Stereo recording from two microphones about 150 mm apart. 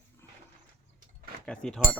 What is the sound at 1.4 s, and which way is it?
Speech, 5° left (ahead or behind).